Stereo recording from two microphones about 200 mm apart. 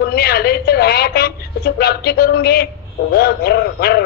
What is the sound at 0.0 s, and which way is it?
A woman's voice, 50° left (ahead or behind).